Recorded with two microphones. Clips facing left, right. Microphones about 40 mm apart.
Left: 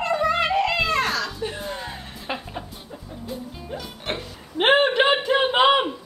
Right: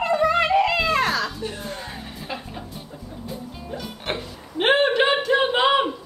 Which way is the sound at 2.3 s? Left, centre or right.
Left.